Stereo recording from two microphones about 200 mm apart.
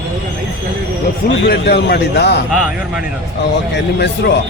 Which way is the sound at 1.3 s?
55° left (ahead or behind).